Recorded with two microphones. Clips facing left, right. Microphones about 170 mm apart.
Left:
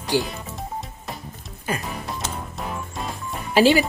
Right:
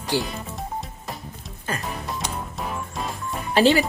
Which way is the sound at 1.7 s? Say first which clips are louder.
Left 3 dB; 10° left (ahead or behind).